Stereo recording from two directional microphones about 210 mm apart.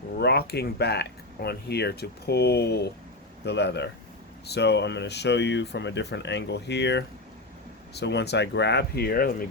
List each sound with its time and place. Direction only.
0.2 s speech: 50° left (ahead or behind)